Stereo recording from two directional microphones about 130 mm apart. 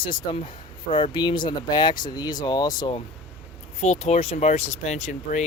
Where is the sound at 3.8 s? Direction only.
60° left (ahead or behind).